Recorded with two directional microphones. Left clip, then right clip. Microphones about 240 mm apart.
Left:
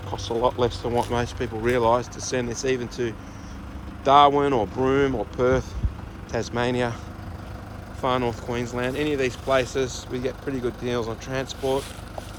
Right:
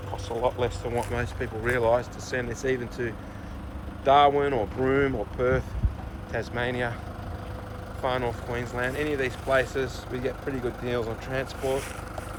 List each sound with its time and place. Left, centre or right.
0.3 s speech: left
0.6 s speech: centre
8.0 s speech: centre